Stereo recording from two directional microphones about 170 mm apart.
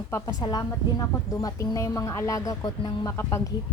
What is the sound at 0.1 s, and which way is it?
A woman's voice, 25° left (ahead or behind).